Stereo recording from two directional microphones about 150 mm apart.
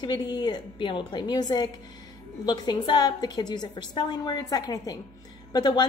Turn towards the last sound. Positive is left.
turn(degrees=30)  # may be behind; listen again after turning